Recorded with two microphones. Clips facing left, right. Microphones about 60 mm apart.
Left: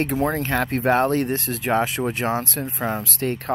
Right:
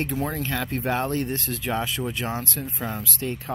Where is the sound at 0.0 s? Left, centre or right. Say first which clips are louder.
Left 5 dB; left.